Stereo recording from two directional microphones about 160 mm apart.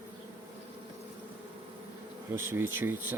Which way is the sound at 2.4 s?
15° right (ahead or behind).